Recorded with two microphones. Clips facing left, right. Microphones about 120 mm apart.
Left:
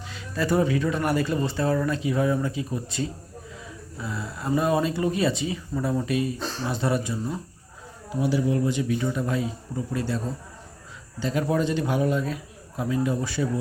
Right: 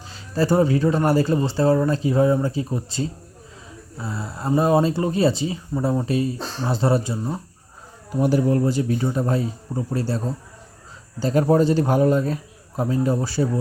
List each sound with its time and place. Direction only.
0.1 s speech: 35° right (ahead or behind)
8.2 s speech: 45° right (ahead or behind)
11.2 s speech: 40° right (ahead or behind)